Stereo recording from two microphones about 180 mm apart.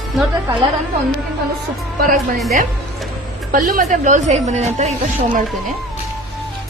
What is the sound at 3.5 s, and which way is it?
A woman's voice, 50° right (ahead or behind).